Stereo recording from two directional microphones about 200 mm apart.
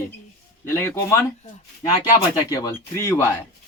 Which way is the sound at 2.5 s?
15° left (ahead or behind).